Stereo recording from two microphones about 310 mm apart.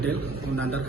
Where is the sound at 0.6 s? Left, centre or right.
Right.